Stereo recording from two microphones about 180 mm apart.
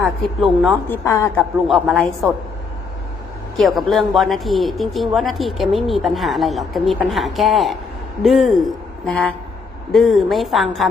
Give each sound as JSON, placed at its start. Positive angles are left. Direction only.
{"t": 0.0, "sound": "speech", "side_deg": 0}
{"t": 0.9, "sound": "a woman's voice", "side_deg": 15}
{"t": 1.6, "sound": "speech", "side_deg": 0}
{"t": 3.6, "sound": "speech", "side_deg": 0}